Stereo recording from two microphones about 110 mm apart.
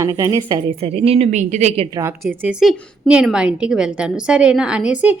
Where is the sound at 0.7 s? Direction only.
65° right (ahead or behind); by 1.9 s 90° right.